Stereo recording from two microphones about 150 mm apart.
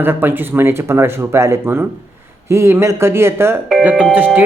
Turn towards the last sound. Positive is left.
turn(degrees=-10)  # may be behind; listen again after turning